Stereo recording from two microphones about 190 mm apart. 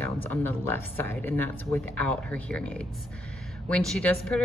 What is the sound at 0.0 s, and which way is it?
Speech, 10° left (ahead or behind).